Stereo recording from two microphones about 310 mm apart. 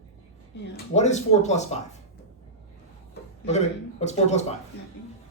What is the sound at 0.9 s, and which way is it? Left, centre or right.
Speech, left.